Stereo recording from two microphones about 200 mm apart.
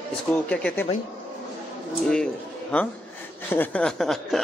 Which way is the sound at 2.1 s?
5° left (ahead or behind).